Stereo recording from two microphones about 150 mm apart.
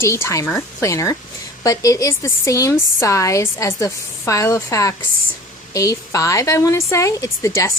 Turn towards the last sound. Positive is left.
turn(degrees=20)  # may be behind; listen again after turning